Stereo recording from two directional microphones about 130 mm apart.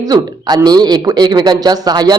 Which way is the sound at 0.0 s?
30° right (ahead or behind).